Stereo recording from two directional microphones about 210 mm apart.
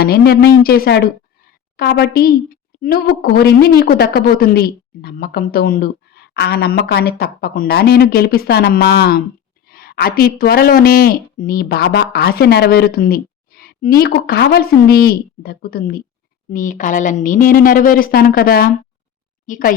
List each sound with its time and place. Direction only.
0.0 s a woman's voice: 50° left (ahead or behind)